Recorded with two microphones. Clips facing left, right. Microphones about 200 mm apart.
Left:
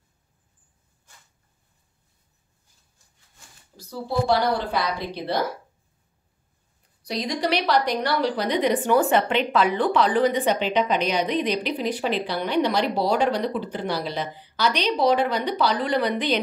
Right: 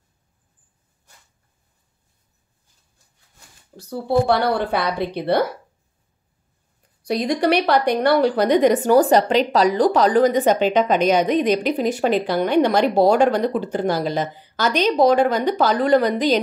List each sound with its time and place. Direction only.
3.9 s a woman's voice: 55° right (ahead or behind)
7.1 s a woman's voice: 55° right (ahead or behind)